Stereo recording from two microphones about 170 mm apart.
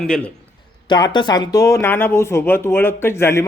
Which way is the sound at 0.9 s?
25° left (ahead or behind).